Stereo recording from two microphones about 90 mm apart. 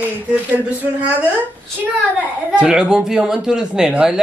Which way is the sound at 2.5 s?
10° right (ahead or behind).